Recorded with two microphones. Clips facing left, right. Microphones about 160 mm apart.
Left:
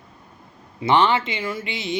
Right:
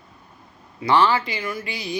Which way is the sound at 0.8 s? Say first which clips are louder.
Even; 20° left (ahead or behind).